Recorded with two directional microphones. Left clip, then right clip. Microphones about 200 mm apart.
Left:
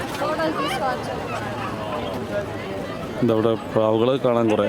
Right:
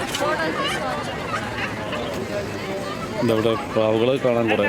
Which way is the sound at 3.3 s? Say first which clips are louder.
Even; 25° left (ahead or behind).